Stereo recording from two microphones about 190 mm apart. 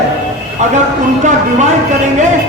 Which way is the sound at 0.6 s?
40° right (ahead or behind).